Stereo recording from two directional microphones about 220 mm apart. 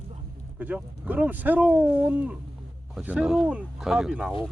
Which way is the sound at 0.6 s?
5° right (ahead or behind).